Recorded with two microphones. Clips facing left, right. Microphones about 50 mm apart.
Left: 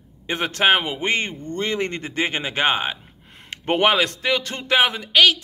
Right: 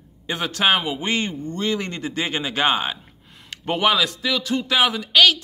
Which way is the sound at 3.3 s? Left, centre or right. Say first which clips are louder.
Left 3 dB; left.